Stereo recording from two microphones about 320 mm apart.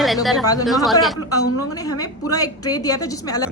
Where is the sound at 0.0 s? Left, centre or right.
Centre.